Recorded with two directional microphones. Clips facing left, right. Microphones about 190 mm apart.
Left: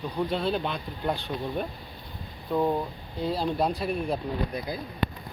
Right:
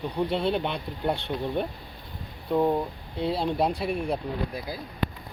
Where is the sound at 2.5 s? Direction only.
15° right (ahead or behind).